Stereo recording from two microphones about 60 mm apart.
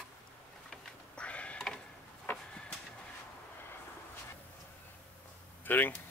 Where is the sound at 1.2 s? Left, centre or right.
Left.